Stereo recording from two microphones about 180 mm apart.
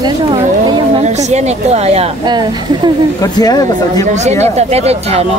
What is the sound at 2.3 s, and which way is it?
Speech, 25° right (ahead or behind).